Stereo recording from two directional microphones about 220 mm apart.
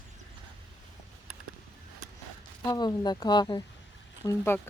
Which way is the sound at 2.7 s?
20° left (ahead or behind).